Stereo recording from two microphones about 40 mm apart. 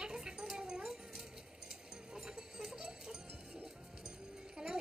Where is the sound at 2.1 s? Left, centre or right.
Centre.